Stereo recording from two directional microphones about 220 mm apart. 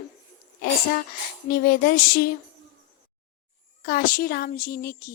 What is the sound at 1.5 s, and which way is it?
Speech, 45° left (ahead or behind).